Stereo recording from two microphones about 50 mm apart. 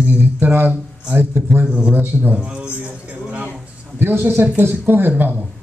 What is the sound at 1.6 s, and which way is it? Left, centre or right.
Speech, right.